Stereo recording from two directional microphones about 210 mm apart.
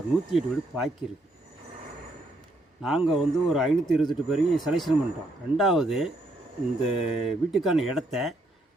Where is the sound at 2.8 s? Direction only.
Centre (ahead or behind).